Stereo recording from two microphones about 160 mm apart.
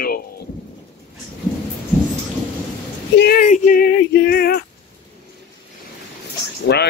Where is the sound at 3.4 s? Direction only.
55° left (ahead or behind); by 4.6 s 75° left (ahead or behind).